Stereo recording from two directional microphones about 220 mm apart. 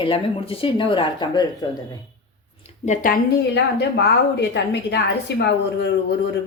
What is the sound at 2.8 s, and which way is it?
A woman's voice, 35° left (ahead or behind).